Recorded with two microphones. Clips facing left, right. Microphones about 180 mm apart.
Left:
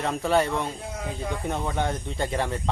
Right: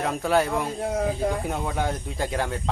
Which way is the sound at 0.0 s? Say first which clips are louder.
Right 1 dB; centre (ahead or behind).